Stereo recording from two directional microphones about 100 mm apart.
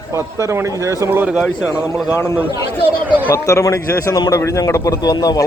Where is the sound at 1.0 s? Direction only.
20° right (ahead or behind).